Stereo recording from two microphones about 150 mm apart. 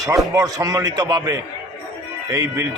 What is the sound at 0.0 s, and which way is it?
A man's voice, 25° right (ahead or behind).